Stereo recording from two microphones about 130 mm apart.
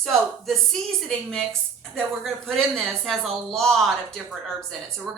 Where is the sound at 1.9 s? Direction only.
5° left (ahead or behind).